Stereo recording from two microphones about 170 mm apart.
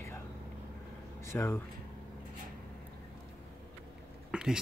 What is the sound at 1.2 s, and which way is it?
Speech, 15° left (ahead or behind).